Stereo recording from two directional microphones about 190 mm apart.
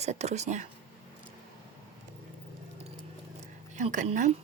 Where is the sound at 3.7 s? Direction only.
40° right (ahead or behind).